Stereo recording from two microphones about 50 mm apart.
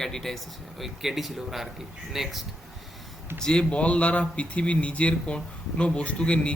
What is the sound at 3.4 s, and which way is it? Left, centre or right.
Speech, centre.